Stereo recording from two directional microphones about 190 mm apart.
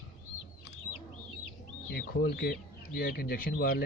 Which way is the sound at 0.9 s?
40° left (ahead or behind).